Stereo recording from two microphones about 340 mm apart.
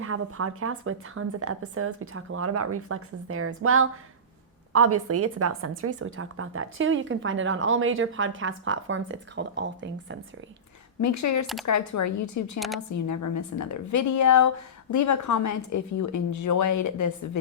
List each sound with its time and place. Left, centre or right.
0.0 s a woman's voice: right
11.0 s a woman's voice: left
12.5 s a woman's voice: centre
13.1 s a woman's voice: left